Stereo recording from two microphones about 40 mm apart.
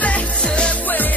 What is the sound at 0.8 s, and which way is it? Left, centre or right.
Music, left.